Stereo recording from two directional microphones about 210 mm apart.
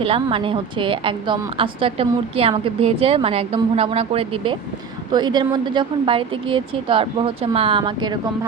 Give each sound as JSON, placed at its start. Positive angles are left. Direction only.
{"t": 0.0, "sound": "a woman's voice", "side_deg": -25}